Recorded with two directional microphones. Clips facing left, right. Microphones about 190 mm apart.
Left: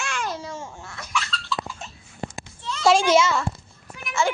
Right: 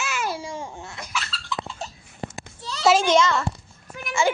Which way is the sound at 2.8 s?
Centre (ahead or behind).